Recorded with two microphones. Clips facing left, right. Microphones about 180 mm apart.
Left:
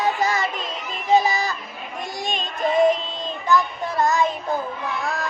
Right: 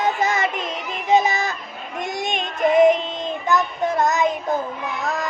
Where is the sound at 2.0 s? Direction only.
20° right (ahead or behind).